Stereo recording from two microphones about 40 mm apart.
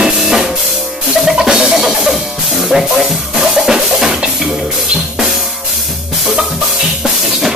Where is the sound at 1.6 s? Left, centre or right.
Centre.